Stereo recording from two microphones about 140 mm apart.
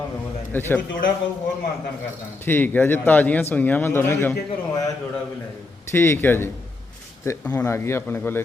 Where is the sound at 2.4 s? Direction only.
15° left (ahead or behind).